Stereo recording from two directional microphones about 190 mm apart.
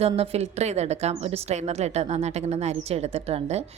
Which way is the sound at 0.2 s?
35° right (ahead or behind).